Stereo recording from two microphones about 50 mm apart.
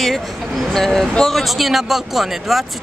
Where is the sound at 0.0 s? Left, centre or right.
Centre.